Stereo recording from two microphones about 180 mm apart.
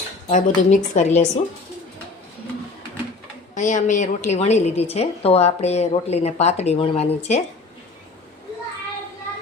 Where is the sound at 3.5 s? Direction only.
45° left (ahead or behind).